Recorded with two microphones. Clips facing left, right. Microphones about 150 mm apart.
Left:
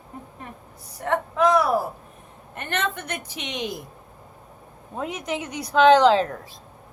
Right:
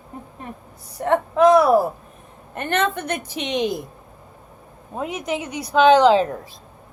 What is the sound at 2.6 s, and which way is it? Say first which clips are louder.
A woman's voice: right 6 dB; 40° right (ahead or behind).